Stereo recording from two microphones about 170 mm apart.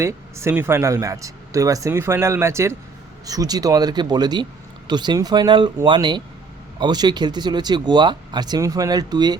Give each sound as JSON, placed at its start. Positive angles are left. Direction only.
{"t": 0.0, "sound": "speech", "side_deg": -15}